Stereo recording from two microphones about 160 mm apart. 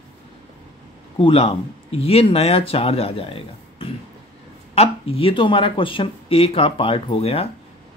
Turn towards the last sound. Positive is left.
turn(degrees=40)  # may be behind; listen again after turning